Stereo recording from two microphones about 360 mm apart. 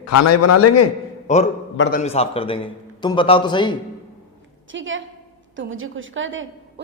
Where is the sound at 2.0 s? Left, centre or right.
Centre.